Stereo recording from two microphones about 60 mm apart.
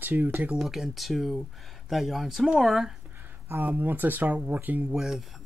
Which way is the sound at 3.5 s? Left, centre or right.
Right.